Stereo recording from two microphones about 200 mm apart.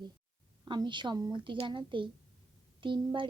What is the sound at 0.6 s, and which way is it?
A woman's voice, 20° right (ahead or behind).